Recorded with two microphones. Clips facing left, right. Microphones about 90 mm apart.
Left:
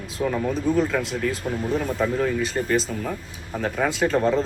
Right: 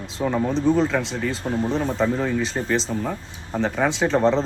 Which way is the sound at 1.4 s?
30° right (ahead or behind).